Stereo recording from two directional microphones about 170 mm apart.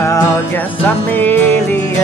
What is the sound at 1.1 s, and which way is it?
Music, 10° left (ahead or behind).